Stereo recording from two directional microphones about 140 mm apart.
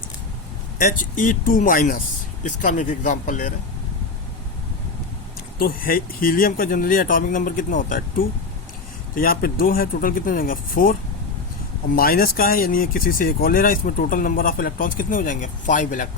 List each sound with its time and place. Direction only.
0.8 s speech: 80° left
2.4 s speech: 65° left (ahead or behind)
5.5 s speech: 90° left
11.9 s speech: 90° left; by 16.0 s 65° left (ahead or behind)